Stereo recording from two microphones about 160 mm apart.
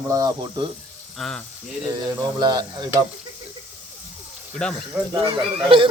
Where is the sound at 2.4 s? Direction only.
25° right (ahead or behind).